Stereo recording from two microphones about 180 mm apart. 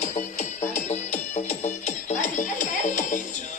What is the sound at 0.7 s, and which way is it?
Music, 40° left (ahead or behind).